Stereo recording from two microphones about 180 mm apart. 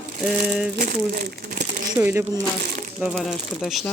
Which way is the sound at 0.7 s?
50° right (ahead or behind).